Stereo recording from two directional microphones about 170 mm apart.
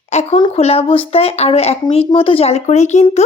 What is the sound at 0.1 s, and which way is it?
A woman's voice, 40° left (ahead or behind).